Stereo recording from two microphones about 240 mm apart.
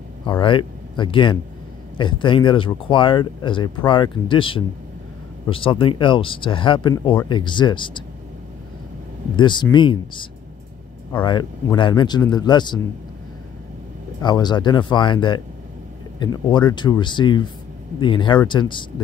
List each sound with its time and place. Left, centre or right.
0.4 s speech: centre
9.4 s speech: centre
14.2 s speech: centre